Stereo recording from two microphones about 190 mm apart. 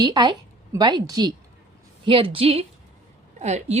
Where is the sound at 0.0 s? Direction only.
25° right (ahead or behind).